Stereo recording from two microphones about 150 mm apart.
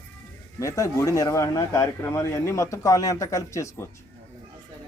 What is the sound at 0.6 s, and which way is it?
Speech, 20° left (ahead or behind).